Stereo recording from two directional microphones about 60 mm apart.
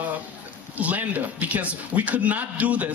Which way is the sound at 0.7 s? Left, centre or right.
Right.